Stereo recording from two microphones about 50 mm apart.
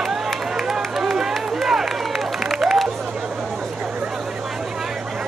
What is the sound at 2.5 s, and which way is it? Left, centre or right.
Music, centre.